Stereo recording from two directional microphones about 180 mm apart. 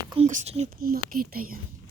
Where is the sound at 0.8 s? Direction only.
55° right (ahead or behind).